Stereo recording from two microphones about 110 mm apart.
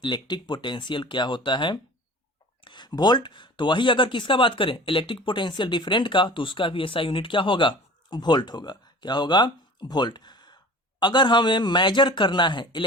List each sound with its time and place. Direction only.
0.0 s speech: 45° left (ahead or behind)